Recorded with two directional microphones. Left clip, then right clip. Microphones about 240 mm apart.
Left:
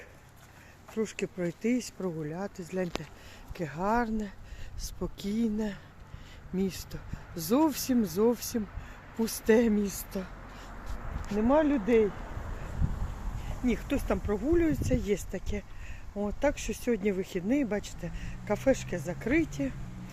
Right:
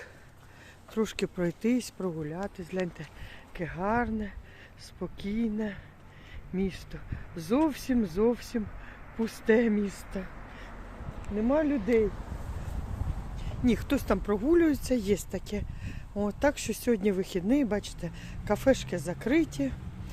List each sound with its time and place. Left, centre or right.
0.9 s speech: centre
11.3 s speech: centre
13.7 s speech: right
17.7 s speech: centre